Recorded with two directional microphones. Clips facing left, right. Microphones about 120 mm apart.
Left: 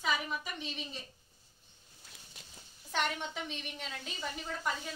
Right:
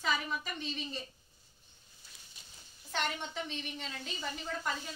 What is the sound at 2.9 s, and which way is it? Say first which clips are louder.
A woman's voice: left 2 dB; 10° left (ahead or behind).